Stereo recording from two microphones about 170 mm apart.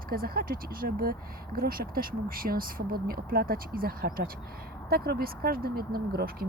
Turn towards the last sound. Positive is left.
turn(degrees=-65)  # may be behind; listen again after turning